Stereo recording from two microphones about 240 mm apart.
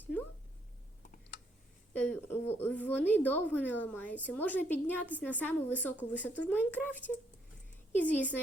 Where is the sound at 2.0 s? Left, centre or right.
Centre.